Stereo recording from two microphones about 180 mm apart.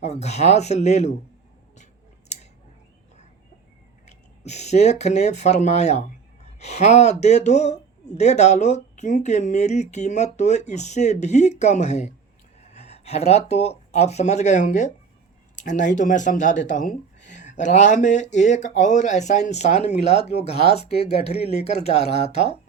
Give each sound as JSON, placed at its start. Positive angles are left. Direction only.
{"t": 0.0, "sound": "speech", "side_deg": 40}
{"t": 4.0, "sound": "speech", "side_deg": 40}